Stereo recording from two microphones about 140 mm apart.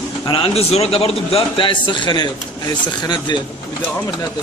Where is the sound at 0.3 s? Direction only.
40° left (ahead or behind).